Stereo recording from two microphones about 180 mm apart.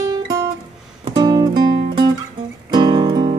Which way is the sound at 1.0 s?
25° right (ahead or behind).